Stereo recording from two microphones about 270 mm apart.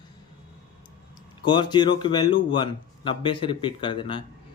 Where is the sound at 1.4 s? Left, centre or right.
Centre.